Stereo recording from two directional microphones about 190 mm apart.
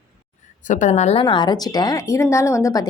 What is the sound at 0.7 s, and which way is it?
Speech, 40° left (ahead or behind).